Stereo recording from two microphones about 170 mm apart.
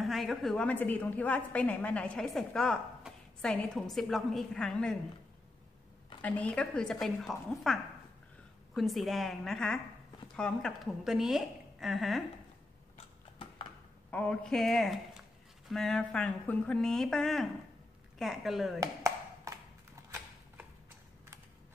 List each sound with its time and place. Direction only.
0.0 s a woman's voice: centre (ahead or behind)
6.2 s a woman's voice: 10° left (ahead or behind)
14.1 s a woman's voice: 5° left (ahead or behind)
18.8 s a sound: 20° right (ahead or behind)
20.0 s horse: 20° right (ahead or behind)